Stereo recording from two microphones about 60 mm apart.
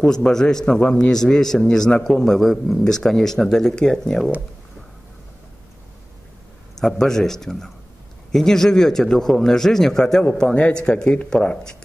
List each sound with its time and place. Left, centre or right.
0.0 s a man's voice: centre
6.8 s a man's voice: centre